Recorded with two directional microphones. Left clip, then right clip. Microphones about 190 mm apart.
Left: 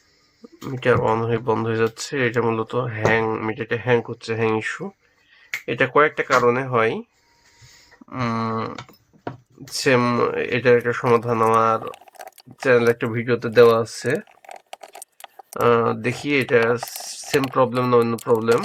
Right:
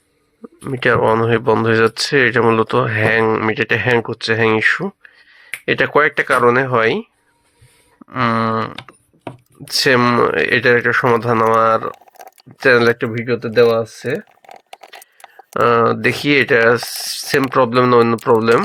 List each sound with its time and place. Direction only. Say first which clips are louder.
0.4 s speech: right 4 dB; 25° right (ahead or behind)
8.1 s speech: right 8 dB; 20° right (ahead or behind)
11.9 s a sound: right 5 dB; 5° right (ahead or behind)
12.6 s speech: right 5 dB; 25° right (ahead or behind)
13.1 s a sound: right 3 dB; 5° right (ahead or behind)
15.5 s speech: right 5 dB; 25° right (ahead or behind)
16.8 s speech: right 8 dB; centre (ahead or behind)
17.5 s speech: right 6 dB; 30° right (ahead or behind)